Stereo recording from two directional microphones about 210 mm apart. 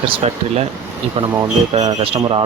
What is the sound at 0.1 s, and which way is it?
Speech, 30° right (ahead or behind).